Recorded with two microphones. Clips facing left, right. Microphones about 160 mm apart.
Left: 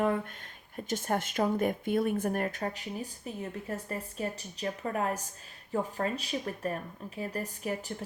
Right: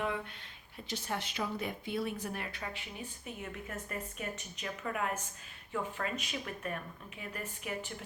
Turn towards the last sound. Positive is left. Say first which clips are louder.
# left 5 dB
turn(degrees=40)  # may be behind; listen again after turning